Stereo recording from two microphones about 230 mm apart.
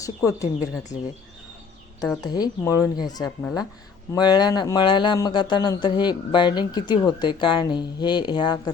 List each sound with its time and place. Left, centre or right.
0.0 s speech: centre
2.2 s speech: centre